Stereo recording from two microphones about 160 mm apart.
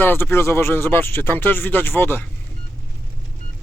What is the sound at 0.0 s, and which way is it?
Speech, 15° left (ahead or behind).